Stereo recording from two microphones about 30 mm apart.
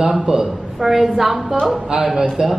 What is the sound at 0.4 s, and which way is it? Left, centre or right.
A woman's voice, centre.